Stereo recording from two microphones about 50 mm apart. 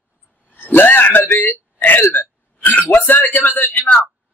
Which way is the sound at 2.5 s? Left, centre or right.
Left.